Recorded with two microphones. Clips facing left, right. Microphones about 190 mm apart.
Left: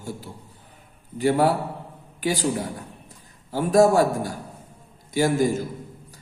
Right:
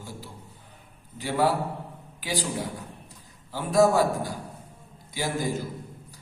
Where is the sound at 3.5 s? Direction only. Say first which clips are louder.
Left 4 dB; 45° left (ahead or behind).